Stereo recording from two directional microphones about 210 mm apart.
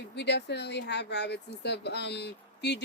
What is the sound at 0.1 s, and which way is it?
Speech, 55° left (ahead or behind).